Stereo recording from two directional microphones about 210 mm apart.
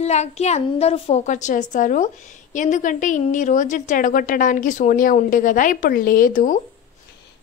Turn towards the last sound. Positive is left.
turn(degrees=40)  # may be behind; listen again after turning